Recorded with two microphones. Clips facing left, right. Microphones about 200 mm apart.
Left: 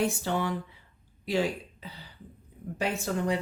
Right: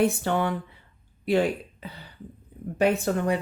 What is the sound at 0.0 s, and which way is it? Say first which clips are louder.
Speech: right 5 dB; 55° right (ahead or behind).